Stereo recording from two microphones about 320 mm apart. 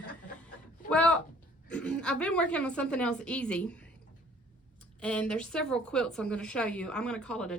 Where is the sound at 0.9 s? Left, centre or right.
Centre.